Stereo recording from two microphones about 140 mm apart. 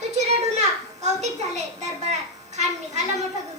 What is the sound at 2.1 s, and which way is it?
Speech, 55° right (ahead or behind).